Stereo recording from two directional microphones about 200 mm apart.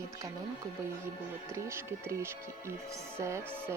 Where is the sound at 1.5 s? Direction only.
15° right (ahead or behind).